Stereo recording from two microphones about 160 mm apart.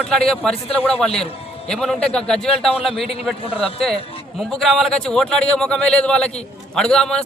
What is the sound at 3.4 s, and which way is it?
Speech, 35° left (ahead or behind).